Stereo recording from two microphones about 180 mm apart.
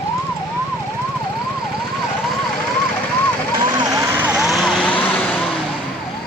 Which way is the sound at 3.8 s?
20° right (ahead or behind).